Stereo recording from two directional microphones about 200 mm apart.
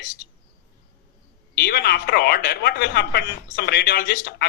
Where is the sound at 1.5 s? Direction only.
50° left (ahead or behind).